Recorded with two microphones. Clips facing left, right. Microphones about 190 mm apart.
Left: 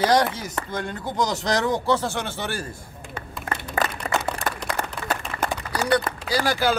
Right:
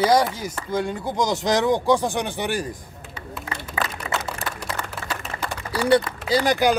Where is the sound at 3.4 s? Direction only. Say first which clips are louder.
Left 3 dB; 50° left (ahead or behind).